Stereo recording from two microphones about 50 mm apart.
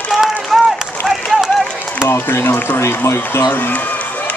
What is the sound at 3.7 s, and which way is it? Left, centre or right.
Run, left.